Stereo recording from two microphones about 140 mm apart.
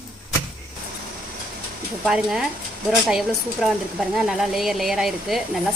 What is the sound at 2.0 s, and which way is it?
A woman's voice, 5° right (ahead or behind).